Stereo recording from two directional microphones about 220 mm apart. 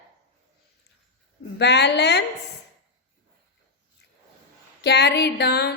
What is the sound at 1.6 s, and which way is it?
Speech, 50° left (ahead or behind).